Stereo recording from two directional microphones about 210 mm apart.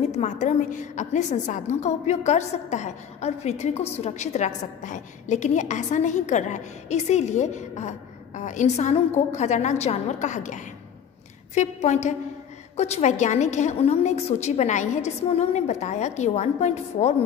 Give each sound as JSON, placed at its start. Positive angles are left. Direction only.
{"t": 0.1, "sound": "a woman's voice", "side_deg": 35}